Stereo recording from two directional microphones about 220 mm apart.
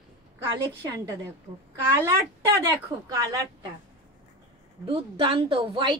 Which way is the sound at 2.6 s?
15° right (ahead or behind).